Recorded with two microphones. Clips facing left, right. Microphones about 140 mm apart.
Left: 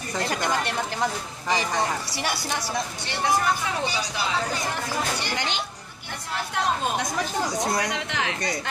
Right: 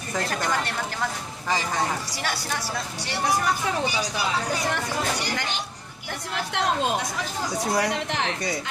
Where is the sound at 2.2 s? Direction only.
15° left (ahead or behind).